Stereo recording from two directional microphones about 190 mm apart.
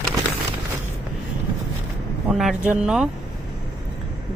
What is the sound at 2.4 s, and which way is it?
Speech, 5° right (ahead or behind).